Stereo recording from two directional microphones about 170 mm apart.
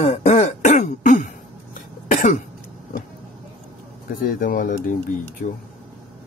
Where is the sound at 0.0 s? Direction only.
40° left (ahead or behind).